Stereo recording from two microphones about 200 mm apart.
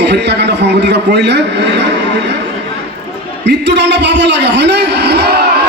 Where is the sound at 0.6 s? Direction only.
55° right (ahead or behind).